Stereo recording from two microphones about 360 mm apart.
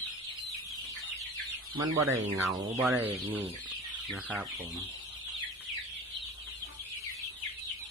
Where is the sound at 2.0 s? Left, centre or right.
Centre.